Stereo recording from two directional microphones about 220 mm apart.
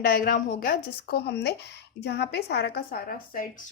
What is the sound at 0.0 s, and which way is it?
A woman's voice, 40° left (ahead or behind).